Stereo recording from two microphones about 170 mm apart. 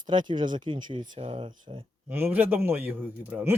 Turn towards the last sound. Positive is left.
turn(degrees=-10)  # may be behind; listen again after turning